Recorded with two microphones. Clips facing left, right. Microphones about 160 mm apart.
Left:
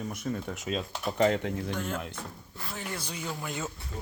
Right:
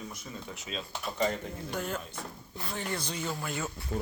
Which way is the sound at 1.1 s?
70° left (ahead or behind).